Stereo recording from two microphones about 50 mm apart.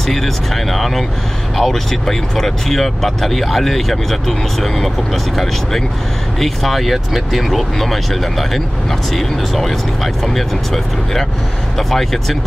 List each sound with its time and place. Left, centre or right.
0.0 s speech: centre